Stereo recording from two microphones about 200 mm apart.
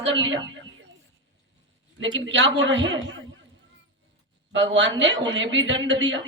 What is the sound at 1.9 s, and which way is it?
A woman's voice, 65° right (ahead or behind).